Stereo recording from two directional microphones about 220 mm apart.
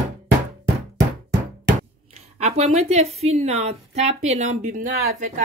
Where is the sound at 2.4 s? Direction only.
30° right (ahead or behind).